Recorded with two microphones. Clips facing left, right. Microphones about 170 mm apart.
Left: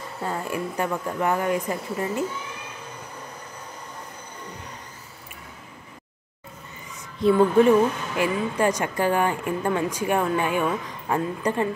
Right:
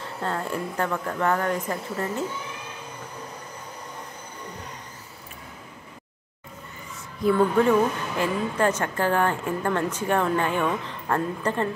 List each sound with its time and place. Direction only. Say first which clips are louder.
0.2 s speech: even; 10° left (ahead or behind)
7.3 s speech: left 3 dB; 15° left (ahead or behind)